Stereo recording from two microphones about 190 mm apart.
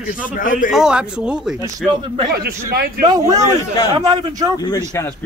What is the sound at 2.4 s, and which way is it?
Speech, 50° right (ahead or behind).